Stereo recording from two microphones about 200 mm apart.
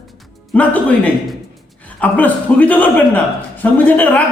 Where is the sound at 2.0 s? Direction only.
10° left (ahead or behind).